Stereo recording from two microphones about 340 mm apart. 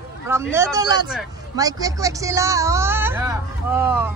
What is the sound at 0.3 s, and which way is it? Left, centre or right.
Speech, centre.